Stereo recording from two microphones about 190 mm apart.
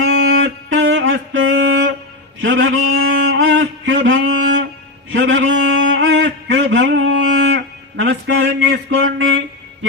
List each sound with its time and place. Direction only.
0.4 s music: 85° right
2.4 s mantra: 90° right
5.1 s a sound: 75° right (ahead or behind)